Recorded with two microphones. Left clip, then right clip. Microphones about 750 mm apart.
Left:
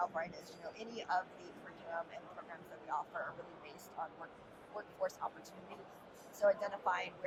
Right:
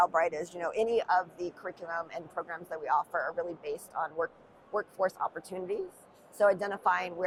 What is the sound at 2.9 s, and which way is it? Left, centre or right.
Speech, right.